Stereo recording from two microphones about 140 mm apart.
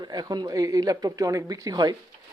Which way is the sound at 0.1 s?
30° right (ahead or behind).